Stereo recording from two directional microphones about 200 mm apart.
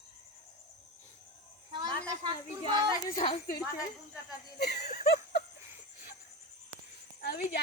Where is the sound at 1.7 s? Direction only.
20° right (ahead or behind).